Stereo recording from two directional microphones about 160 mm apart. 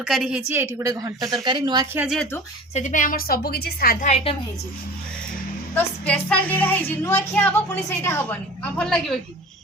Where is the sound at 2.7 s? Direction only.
50° left (ahead or behind); by 3.9 s 75° left (ahead or behind).